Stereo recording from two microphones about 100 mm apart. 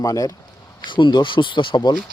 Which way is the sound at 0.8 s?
55° left (ahead or behind).